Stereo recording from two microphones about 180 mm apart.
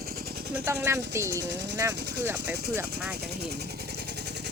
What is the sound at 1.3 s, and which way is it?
Speech, 75° right (ahead or behind).